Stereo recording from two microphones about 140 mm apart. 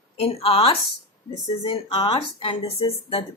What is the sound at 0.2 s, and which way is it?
Speech, 45° left (ahead or behind).